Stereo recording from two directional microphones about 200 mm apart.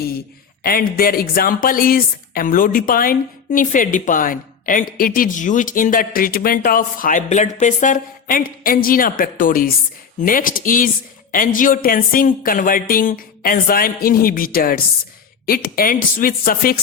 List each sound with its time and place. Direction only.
0.6 s a woman's voice: 45° left (ahead or behind)